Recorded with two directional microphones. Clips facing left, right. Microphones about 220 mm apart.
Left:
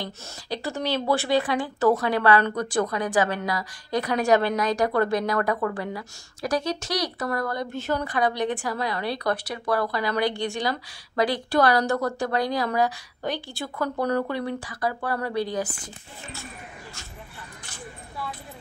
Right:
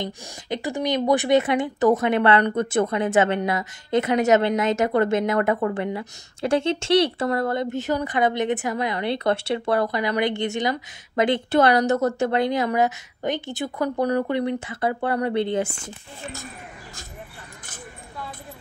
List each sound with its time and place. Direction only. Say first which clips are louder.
0.0 s a woman's voice: right 4 dB; 15° right (ahead or behind)